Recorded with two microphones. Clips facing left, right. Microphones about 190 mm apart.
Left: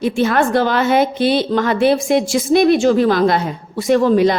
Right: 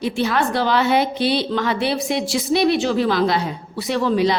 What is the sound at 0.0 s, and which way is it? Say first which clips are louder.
A woman's voice: left 5 dB; 50° left (ahead or behind).